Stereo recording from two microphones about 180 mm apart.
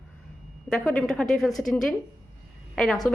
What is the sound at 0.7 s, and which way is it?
A woman's voice, 5° left (ahead or behind).